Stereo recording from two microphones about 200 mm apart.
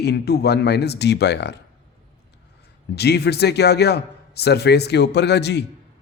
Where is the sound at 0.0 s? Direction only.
55° left (ahead or behind).